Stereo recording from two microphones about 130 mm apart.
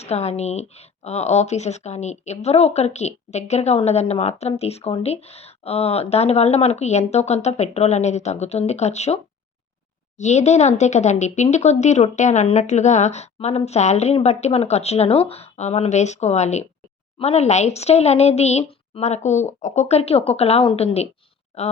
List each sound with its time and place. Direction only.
0.0 s speech: 55° left (ahead or behind)